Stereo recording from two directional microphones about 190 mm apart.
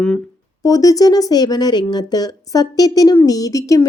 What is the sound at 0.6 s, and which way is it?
A woman's voice, 20° left (ahead or behind).